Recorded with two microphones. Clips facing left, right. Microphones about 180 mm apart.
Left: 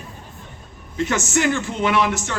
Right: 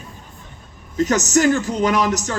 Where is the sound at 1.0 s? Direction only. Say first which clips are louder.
Right 4 dB; 40° right (ahead or behind).